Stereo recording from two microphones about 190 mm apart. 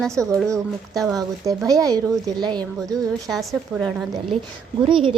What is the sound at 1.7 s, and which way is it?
A woman's voice, 20° right (ahead or behind).